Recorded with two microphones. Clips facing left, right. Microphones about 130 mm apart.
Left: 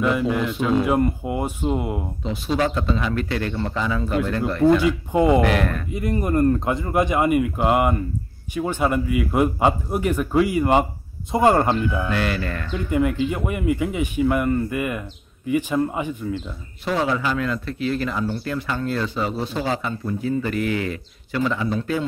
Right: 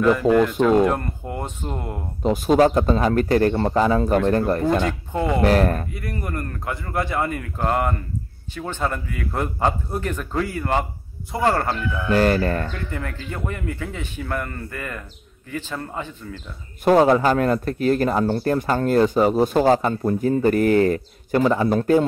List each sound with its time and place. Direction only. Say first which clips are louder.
0.8 s speech: left 3 dB; 10° left (ahead or behind)
2.2 s a man's voice: right 7 dB; 45° right (ahead or behind)
4.8 s speech: left 5 dB; 15° left (ahead or behind)
5.4 s speech: right 3 dB; 35° right (ahead or behind)
5.9 s speech: left 7 dB; 20° left (ahead or behind)
12.1 s speech: right 6 dB; 40° right (ahead or behind)
12.7 s speech: left 9 dB; 15° left (ahead or behind)
16.8 s a man's voice: right 7 dB; 45° right (ahead or behind)